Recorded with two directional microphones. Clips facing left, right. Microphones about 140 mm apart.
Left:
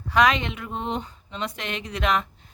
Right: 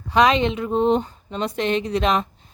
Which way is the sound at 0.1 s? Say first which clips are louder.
Right 4 dB; 25° right (ahead or behind).